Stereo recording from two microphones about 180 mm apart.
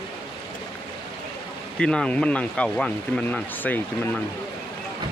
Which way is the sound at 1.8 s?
5° left (ahead or behind).